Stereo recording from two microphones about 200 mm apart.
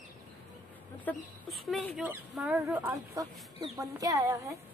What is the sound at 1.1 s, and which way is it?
Speech, 10° left (ahead or behind).